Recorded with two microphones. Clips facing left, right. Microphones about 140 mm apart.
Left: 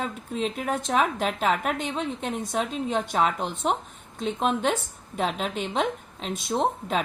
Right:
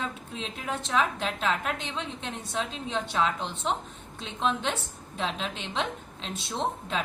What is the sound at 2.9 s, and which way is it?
Speech, 50° left (ahead or behind).